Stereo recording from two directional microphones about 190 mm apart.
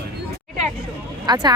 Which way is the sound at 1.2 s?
20° right (ahead or behind).